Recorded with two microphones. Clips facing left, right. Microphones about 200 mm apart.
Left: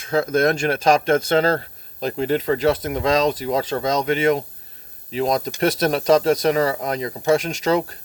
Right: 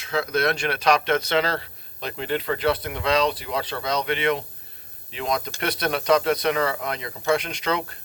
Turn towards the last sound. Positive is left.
turn(degrees=40)  # may be behind; listen again after turning